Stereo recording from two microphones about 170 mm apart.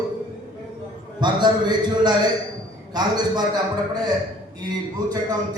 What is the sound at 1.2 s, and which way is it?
A man's voice, 25° right (ahead or behind).